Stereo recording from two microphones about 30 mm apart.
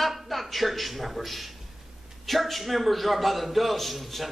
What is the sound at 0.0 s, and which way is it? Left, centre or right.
A man's voice, centre.